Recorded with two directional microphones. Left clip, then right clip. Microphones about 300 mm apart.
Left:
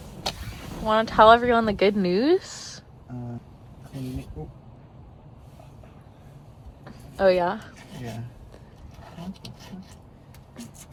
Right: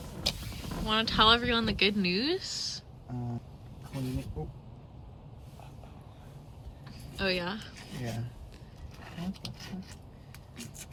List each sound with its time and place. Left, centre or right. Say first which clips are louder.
0.6 s speech: left 7 dB; centre
3.9 s speech: left 2 dB; centre
7.2 s a woman's voice: left 12 dB; centre
7.9 s a sound: even; centre